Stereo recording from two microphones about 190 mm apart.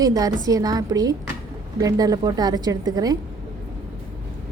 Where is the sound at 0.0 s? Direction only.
20° right (ahead or behind).